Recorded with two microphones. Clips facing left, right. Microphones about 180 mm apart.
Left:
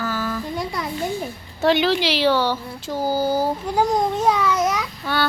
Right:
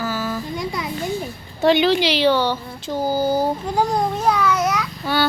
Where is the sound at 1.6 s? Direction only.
Centre (ahead or behind).